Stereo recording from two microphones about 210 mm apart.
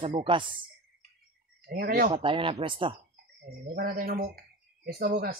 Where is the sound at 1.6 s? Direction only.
45° right (ahead or behind).